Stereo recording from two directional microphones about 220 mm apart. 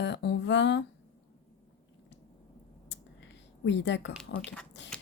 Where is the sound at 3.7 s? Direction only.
55° left (ahead or behind).